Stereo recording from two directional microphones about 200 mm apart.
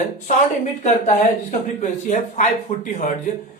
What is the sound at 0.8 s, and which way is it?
Speech, 35° left (ahead or behind).